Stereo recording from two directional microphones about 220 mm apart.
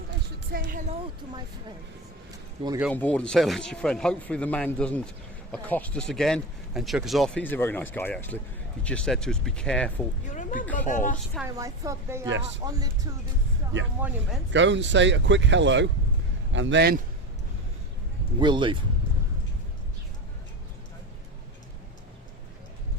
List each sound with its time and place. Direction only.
0.5 s a woman's voice: 40° right (ahead or behind)
2.6 s speech: 25° right (ahead or behind)
2.9 s speech: 5° left (ahead or behind)
10.2 s speech: 35° left (ahead or behind)
11.4 s speech: 15° right (ahead or behind)
14.0 s speech: 10° right (ahead or behind)
14.5 s speech: 55° right (ahead or behind)
18.3 s speech: 20° right (ahead or behind)